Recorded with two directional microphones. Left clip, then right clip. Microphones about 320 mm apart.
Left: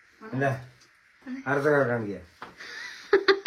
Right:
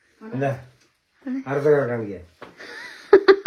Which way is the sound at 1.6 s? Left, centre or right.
Left.